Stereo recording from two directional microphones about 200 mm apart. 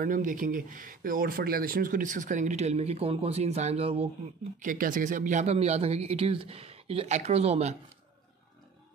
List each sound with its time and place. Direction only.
0.0 s speech: 40° right (ahead or behind)
4.6 s speech: 40° right (ahead or behind)